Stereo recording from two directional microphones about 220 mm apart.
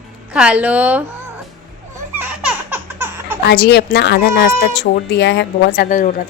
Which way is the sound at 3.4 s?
50° left (ahead or behind).